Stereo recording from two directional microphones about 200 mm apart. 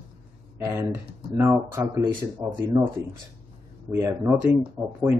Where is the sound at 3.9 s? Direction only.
10° right (ahead or behind).